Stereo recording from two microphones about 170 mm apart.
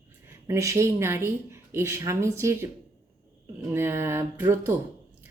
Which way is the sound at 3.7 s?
15° right (ahead or behind).